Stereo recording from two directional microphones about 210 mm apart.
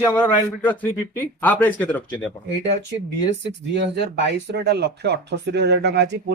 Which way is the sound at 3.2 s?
55° right (ahead or behind).